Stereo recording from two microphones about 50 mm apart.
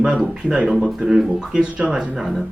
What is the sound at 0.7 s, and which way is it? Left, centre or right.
Speech, centre.